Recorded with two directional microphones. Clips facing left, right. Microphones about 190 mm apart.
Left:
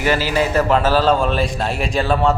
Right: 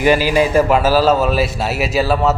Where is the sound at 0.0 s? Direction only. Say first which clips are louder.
Right 4 dB; 15° right (ahead or behind).